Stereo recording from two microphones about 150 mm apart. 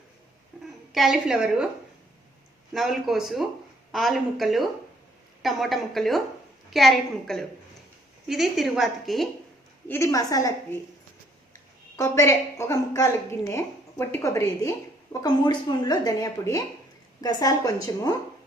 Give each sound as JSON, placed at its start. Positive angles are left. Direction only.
{"t": 0.5, "sound": "a sound", "side_deg": -5}
{"t": 0.9, "sound": "a woman's voice", "side_deg": 0}
{"t": 2.7, "sound": "a woman's voice", "side_deg": 0}
{"t": 9.9, "sound": "a woman's voice", "side_deg": 20}
{"t": 11.9, "sound": "a woman's voice", "side_deg": 20}